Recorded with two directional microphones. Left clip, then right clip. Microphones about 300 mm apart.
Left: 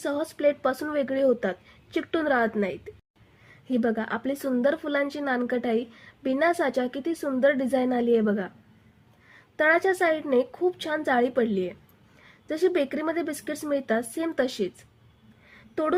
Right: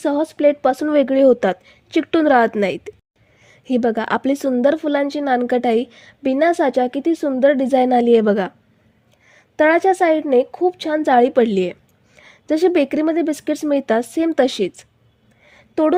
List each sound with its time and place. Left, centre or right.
0.0 s a woman's voice: right
9.6 s a woman's voice: right
15.4 s a sound: right